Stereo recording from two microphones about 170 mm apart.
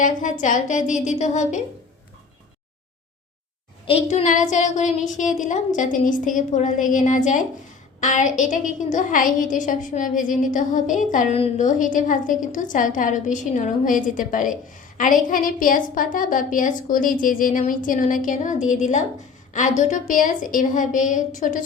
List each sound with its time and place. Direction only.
0.0 s a woman's voice: 50° left (ahead or behind)
3.8 s a woman's voice: 40° left (ahead or behind)